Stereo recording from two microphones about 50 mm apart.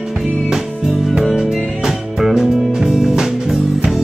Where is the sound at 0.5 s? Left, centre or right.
Centre.